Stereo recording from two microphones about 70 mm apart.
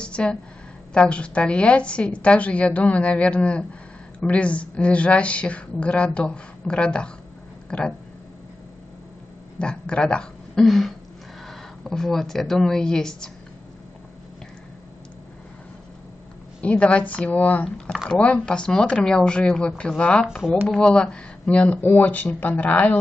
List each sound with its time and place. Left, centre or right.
0.0 s a sound: centre
0.9 s a woman's voice: centre
9.6 s speech: centre
16.6 s a woman's voice: centre